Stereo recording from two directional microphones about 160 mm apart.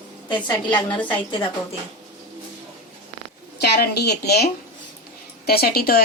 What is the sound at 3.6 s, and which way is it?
Speech, 90° left.